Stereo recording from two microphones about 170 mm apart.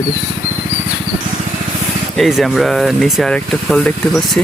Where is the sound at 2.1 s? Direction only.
Centre (ahead or behind).